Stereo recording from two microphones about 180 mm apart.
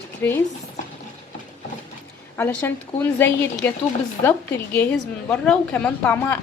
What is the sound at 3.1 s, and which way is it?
A woman's voice, 10° left (ahead or behind).